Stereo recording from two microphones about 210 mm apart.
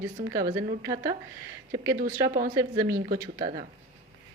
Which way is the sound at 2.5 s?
15° right (ahead or behind).